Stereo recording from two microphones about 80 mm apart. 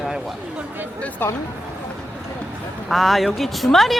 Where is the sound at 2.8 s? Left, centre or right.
Centre.